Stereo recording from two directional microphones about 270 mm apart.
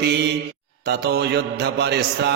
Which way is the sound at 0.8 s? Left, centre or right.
Right.